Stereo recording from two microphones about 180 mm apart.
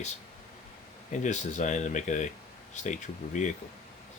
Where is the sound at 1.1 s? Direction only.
40° left (ahead or behind).